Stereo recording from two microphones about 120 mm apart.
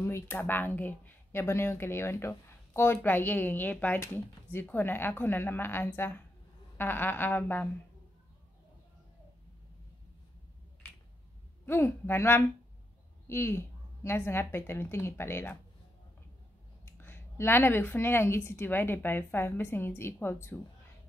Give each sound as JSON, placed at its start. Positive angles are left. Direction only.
{"t": 0.0, "sound": "speech", "side_deg": 20}
{"t": 11.6, "sound": "a woman's voice", "side_deg": 20}
{"t": 16.8, "sound": "a woman's voice", "side_deg": 20}